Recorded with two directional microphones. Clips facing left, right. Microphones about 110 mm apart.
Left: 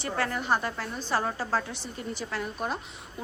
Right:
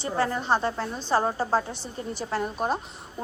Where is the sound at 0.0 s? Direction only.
25° right (ahead or behind).